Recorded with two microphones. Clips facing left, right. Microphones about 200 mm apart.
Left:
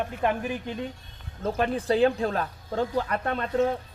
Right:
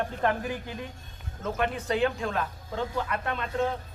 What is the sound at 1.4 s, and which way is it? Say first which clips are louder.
Speech: left 4 dB; 35° left (ahead or behind).